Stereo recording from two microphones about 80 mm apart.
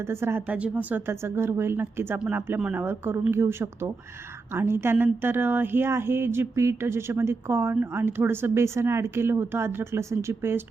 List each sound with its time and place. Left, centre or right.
0.1 s speech: right
0.4 s speech: centre; by 10.6 s right